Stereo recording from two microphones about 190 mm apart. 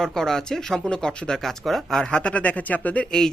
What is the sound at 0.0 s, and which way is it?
Speech, centre (ahead or behind).